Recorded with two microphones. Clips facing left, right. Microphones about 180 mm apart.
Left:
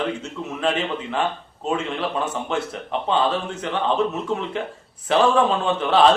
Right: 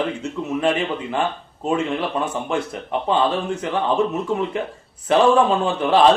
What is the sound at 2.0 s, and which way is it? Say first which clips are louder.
A man's voice: right 1 dB; centre (ahead or behind).